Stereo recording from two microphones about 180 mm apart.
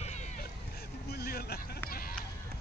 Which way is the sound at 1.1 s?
60° left (ahead or behind).